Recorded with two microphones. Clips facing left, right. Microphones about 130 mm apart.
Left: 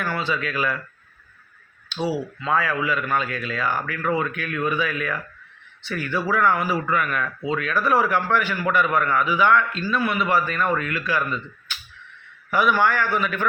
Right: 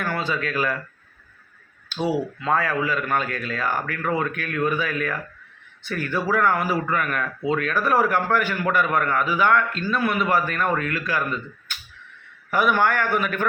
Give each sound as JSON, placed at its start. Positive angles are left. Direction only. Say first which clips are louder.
{"t": 0.0, "sound": "speech", "louder": "even", "side_deg": -45}
{"t": 2.0, "sound": "speech", "louder": "right 2 dB", "side_deg": -50}